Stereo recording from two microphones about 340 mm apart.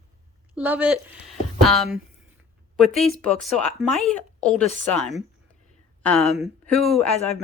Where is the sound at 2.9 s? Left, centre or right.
Centre.